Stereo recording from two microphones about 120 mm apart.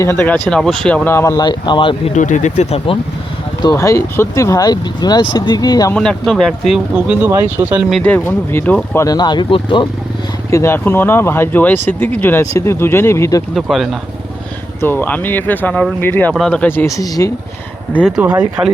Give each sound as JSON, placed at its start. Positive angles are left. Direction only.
{"t": 0.0, "sound": "speech", "side_deg": 20}
{"t": 1.1, "sound": "speech", "side_deg": 20}
{"t": 1.4, "sound": "speech", "side_deg": 40}
{"t": 2.1, "sound": "speech", "side_deg": 90}
{"t": 3.6, "sound": "speech", "side_deg": 30}
{"t": 5.9, "sound": "speech", "side_deg": 5}
{"t": 6.9, "sound": "speech", "side_deg": -10}
{"t": 8.0, "sound": "speech", "side_deg": 15}
{"t": 9.0, "sound": "speech", "side_deg": 35}
{"t": 10.5, "sound": "speech", "side_deg": 20}
{"t": 13.5, "sound": "speech", "side_deg": 0}
{"t": 14.8, "sound": "speech", "side_deg": 20}
{"t": 17.0, "sound": "speech", "side_deg": 30}
{"t": 18.2, "sound": "speech", "side_deg": -10}